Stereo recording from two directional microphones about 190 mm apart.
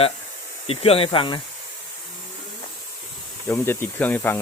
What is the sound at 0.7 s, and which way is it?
Speech, 30° left (ahead or behind).